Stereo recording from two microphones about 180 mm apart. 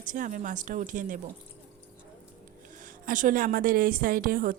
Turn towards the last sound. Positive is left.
turn(degrees=-50)  # may be behind; listen again after turning